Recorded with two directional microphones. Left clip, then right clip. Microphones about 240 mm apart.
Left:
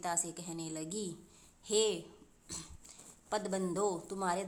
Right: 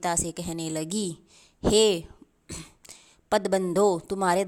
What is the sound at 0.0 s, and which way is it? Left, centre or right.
A woman's voice, right.